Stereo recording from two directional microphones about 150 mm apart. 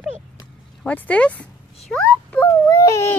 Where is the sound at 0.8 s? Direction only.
10° left (ahead or behind).